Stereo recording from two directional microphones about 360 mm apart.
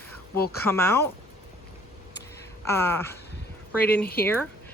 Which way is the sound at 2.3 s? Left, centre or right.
Centre.